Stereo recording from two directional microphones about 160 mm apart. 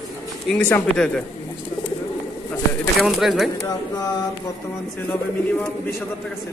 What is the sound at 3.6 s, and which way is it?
Speech, 20° left (ahead or behind).